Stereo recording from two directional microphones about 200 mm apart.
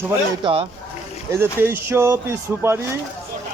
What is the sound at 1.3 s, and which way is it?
A man's voice, 10° right (ahead or behind).